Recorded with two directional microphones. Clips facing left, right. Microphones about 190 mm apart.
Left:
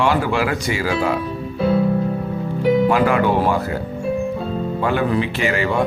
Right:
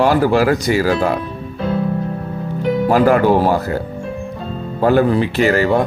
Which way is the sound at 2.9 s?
40° right (ahead or behind).